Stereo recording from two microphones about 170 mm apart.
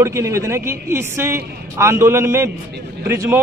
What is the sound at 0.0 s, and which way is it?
Speech, 15° right (ahead or behind).